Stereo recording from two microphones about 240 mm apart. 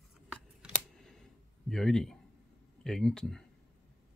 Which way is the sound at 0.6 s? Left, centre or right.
Centre.